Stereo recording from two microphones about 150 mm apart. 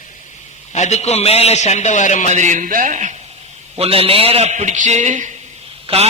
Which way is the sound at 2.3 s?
55° right (ahead or behind).